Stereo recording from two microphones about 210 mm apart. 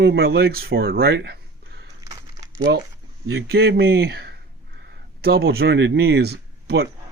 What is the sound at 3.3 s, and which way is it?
Speech, 50° right (ahead or behind).